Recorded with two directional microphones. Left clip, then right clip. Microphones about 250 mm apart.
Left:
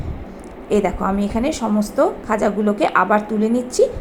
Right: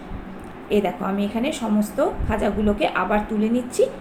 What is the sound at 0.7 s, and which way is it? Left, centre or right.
Speech, centre.